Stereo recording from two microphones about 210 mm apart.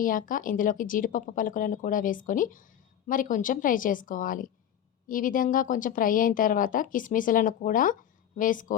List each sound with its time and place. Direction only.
0.0 s a woman's voice: 40° left (ahead or behind)